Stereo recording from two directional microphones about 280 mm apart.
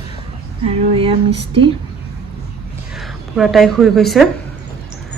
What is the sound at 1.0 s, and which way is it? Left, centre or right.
Music, centre.